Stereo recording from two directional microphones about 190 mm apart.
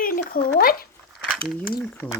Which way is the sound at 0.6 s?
50° left (ahead or behind).